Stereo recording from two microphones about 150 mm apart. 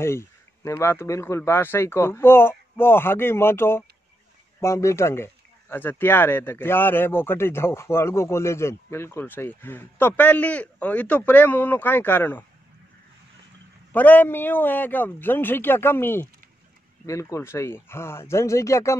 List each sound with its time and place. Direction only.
0.0 s speech: 15° left (ahead or behind)
13.9 s speech: 10° left (ahead or behind)